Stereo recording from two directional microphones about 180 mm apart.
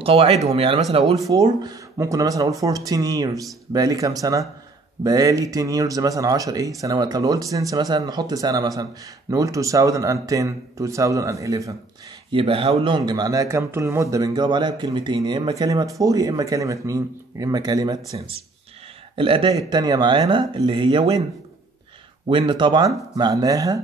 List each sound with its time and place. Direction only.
0.0 s speech: 35° right (ahead or behind); by 11.7 s 15° right (ahead or behind)
12.3 s speech: 30° right (ahead or behind)
19.1 s speech: 30° right (ahead or behind)
22.3 s speech: 25° right (ahead or behind)